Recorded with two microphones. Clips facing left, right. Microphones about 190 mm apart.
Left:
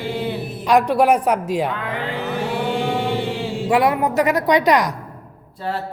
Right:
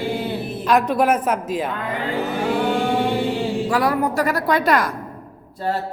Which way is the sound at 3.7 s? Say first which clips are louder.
Left 5 dB; 25° left (ahead or behind).